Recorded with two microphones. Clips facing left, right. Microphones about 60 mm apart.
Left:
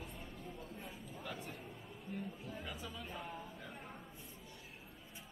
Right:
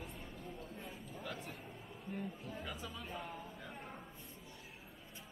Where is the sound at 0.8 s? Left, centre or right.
Centre.